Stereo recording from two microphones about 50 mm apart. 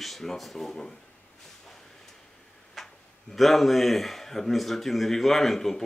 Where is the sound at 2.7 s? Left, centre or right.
Centre.